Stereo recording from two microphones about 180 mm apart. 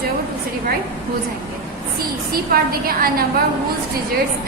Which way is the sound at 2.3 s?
55° right (ahead or behind).